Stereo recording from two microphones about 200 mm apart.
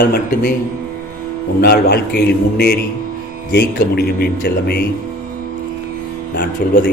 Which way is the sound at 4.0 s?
50° left (ahead or behind).